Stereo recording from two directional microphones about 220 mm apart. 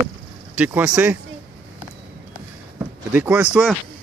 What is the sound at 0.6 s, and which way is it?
Speech, 5° right (ahead or behind).